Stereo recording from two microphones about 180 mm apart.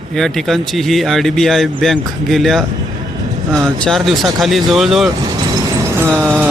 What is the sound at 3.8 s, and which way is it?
Speech, centre (ahead or behind).